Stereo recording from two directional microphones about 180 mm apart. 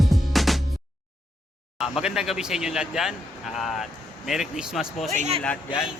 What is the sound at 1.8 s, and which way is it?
Speech, 5° right (ahead or behind).